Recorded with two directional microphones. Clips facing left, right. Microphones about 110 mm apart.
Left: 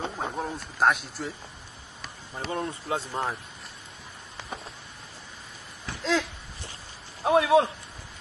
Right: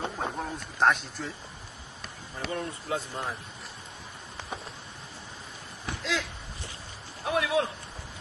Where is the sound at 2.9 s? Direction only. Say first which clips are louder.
Left 1 dB; 30° left (ahead or behind).